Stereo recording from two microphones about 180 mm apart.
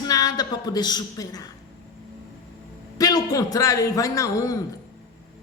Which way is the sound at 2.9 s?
20° left (ahead or behind).